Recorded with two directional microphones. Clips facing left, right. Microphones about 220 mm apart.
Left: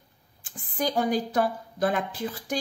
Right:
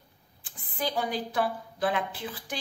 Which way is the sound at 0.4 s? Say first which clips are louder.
Left 4 dB; 45° left (ahead or behind).